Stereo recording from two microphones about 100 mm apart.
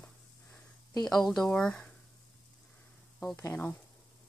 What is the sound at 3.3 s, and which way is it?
Speech, 25° left (ahead or behind).